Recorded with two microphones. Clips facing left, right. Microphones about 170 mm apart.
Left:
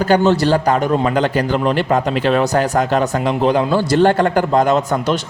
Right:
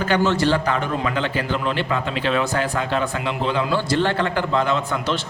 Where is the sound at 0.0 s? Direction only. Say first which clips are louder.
Left 6 dB; 40° left (ahead or behind).